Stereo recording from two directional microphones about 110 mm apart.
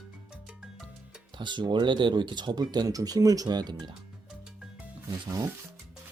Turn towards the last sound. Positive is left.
turn(degrees=-35)  # may be behind; listen again after turning